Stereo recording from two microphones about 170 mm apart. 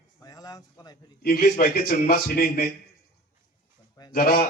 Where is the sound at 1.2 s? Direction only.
60° left (ahead or behind).